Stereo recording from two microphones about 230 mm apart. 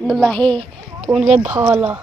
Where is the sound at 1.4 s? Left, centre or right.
Centre.